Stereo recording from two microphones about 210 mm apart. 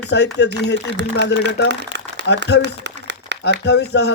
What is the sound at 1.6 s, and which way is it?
Crumpling, 55° right (ahead or behind).